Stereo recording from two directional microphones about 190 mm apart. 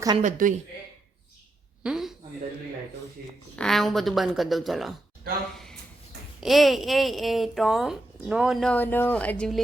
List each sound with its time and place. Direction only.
0.2 s a woman's voice: 40° right (ahead or behind)
1.8 s speech: 5° right (ahead or behind)
3.5 s speech: 5° left (ahead or behind)
6.4 s speech: centre (ahead or behind)